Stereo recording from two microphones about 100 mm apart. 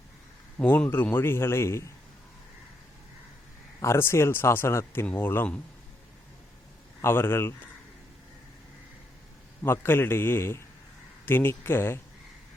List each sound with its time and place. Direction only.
0.6 s a man's voice: 20° left (ahead or behind)
3.8 s a man's voice: 25° left (ahead or behind)
7.0 s a man's voice: 25° left (ahead or behind)
9.8 s a man's voice: 25° left (ahead or behind)